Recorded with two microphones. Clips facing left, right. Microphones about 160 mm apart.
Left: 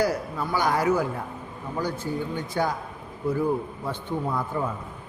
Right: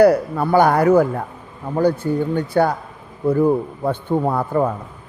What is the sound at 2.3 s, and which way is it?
A man's voice, 60° right (ahead or behind).